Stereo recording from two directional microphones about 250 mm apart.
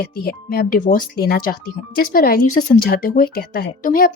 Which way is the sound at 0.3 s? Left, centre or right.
Left.